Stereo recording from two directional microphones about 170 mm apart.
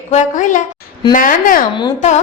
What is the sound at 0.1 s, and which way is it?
A woman's voice, 45° left (ahead or behind).